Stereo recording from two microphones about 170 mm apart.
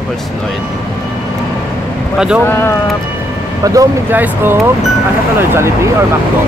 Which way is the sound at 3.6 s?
20° right (ahead or behind).